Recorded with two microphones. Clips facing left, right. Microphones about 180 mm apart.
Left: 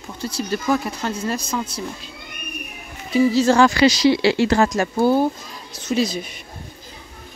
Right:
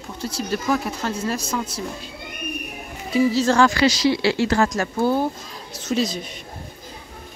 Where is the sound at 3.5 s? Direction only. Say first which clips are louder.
Left 2 dB; 15° left (ahead or behind).